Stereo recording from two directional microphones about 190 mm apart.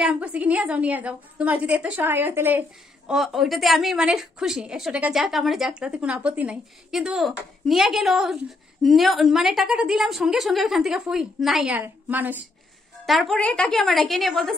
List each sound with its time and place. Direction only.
0.0 s a woman's voice: 5° right (ahead or behind)